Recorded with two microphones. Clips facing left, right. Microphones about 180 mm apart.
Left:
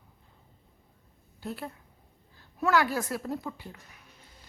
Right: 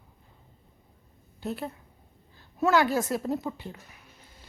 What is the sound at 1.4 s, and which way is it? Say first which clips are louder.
A woman's voice: right 4 dB; 20° right (ahead or behind).